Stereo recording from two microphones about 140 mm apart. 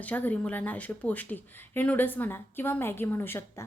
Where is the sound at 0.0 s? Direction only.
10° left (ahead or behind).